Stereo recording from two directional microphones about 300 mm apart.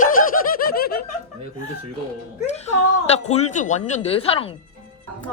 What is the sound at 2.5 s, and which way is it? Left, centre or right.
Speech, left.